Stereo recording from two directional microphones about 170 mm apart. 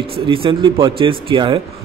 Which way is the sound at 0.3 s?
30° right (ahead or behind).